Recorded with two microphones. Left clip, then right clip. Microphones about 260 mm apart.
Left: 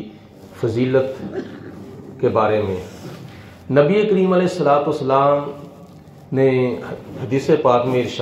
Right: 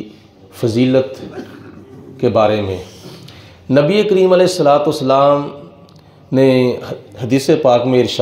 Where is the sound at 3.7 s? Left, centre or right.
Right.